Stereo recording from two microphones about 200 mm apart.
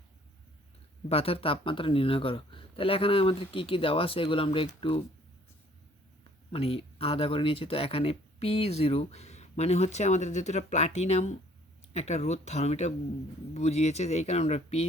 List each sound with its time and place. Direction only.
1.0 s speech: 30° left (ahead or behind)
6.5 s speech: 30° left (ahead or behind)